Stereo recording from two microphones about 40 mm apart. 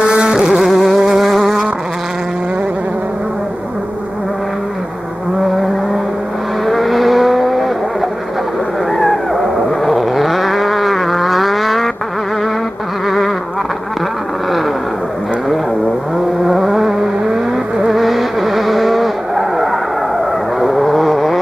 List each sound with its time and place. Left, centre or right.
0.0 s insect: centre
0.3 s music: centre
6.6 s vehicle: centre
8.9 s a sound: centre
16.4 s vehicle: centre